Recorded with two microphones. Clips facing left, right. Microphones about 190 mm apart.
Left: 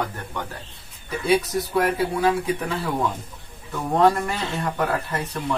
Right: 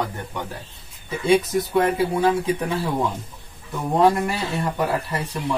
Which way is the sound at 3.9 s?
10° right (ahead or behind).